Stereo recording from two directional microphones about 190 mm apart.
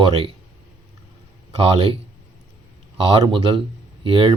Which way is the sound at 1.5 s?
30° right (ahead or behind).